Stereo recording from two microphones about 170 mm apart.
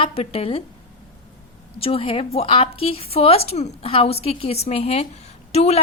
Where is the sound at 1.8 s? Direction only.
35° left (ahead or behind).